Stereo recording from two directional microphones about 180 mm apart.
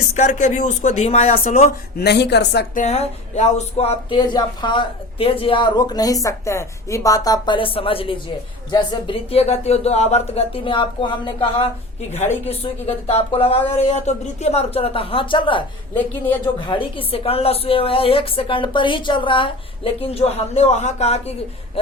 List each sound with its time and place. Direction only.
0.2 s speech: 45° left (ahead or behind); by 2.6 s 70° left (ahead or behind)
2.7 s a sound: 35° left (ahead or behind)
8.7 s a woman's voice: 25° left (ahead or behind)
16.0 s speech: 10° left (ahead or behind)
16.6 s a woman's voice: 30° left (ahead or behind)